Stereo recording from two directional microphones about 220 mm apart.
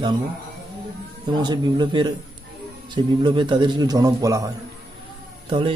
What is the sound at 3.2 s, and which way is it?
A man's voice, 20° right (ahead or behind).